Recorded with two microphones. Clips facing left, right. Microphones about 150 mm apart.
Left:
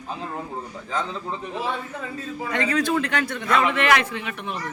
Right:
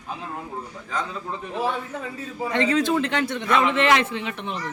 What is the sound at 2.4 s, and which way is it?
A man's voice, 25° right (ahead or behind).